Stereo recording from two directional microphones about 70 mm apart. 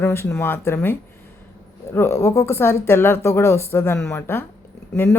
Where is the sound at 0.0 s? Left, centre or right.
Left.